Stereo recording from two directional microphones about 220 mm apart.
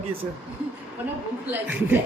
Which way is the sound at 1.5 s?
5° right (ahead or behind).